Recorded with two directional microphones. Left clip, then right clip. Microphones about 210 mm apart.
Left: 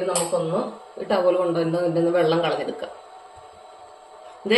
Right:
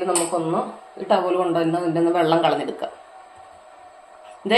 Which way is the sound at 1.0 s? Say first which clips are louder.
Even; 40° right (ahead or behind).